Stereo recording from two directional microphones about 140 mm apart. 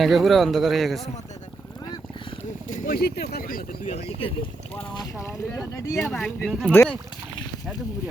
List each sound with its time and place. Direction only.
0.0 s a man's voice: centre (ahead or behind)
2.6 s speech: 75° left (ahead or behind)
5.1 s speech: 20° left (ahead or behind)